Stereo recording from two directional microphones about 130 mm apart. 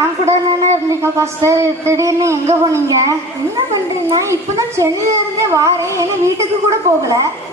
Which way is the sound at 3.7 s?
25° right (ahead or behind).